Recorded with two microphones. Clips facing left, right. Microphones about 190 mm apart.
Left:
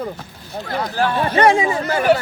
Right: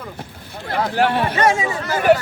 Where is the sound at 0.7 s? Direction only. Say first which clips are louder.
Right 2 dB; 65° right (ahead or behind).